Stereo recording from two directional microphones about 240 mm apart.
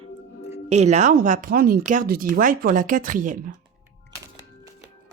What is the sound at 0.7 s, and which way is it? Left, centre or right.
Speech, right.